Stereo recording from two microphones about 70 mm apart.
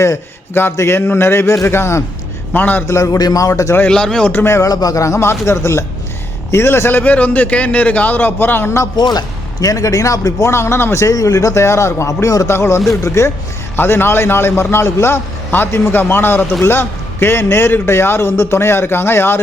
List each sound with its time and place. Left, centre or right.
0.0 s a man's voice: left
2.5 s a man's voice: left
2.8 s speech: left
3.8 s speech: centre
4.3 s a man's voice: left
4.6 s a man's voice: left
9.0 s speech: left
11.0 s speech: left
12.5 s a man's voice: left
13.7 s a man's voice: left